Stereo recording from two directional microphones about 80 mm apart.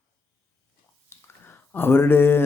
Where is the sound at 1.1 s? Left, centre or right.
Left.